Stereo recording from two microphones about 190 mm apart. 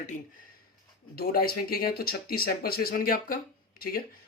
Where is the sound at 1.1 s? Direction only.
50° left (ahead or behind).